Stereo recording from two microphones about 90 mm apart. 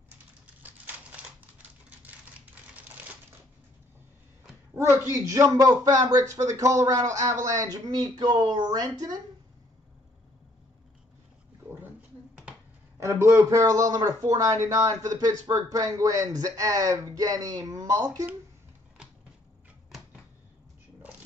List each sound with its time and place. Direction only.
0.6 s a sound: 20° right (ahead or behind)
4.7 s a man's voice: 35° right (ahead or behind)
13.0 s speech: 30° right (ahead or behind)